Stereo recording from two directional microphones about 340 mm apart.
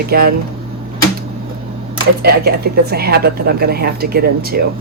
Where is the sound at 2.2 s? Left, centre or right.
Right.